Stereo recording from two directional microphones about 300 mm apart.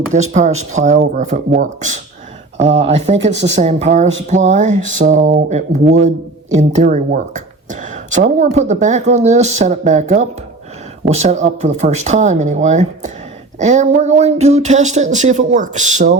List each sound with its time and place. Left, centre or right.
0.1 s speech: right
2.6 s speech: right
2.8 s speech: right